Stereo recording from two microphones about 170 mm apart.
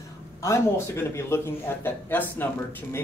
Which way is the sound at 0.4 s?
15° left (ahead or behind).